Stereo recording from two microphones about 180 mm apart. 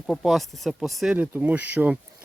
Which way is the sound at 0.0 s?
Centre (ahead or behind).